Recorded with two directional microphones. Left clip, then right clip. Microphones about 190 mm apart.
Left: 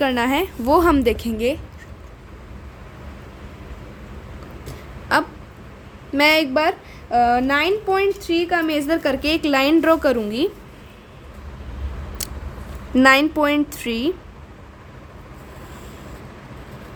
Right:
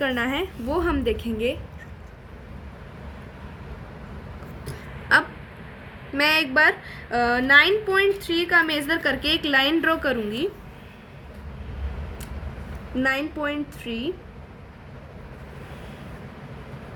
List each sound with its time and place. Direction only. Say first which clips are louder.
0.0 s a woman's voice: left 5 dB; 35° left (ahead or behind)
6.1 s a woman's voice: left 3 dB; 35° left (ahead or behind)
13.0 s a woman's voice: left 10 dB; 45° left (ahead or behind)